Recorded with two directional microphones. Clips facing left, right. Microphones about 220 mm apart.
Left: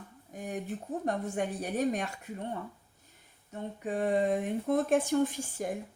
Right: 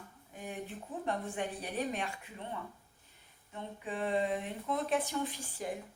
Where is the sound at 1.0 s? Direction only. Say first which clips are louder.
Left 4 dB; 45° left (ahead or behind).